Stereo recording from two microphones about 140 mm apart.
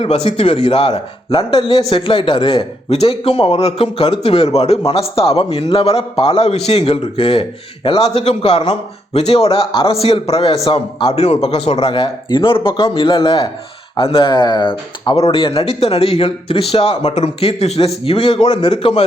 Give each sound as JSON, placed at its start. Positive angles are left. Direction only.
{"t": 0.0, "sound": "a man's voice", "side_deg": 45}